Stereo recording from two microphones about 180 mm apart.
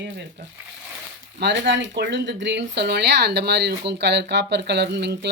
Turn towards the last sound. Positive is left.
turn(degrees=-70)  # may be behind; listen again after turning